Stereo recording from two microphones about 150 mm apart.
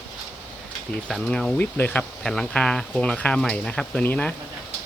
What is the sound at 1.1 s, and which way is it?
Speech, 5° left (ahead or behind).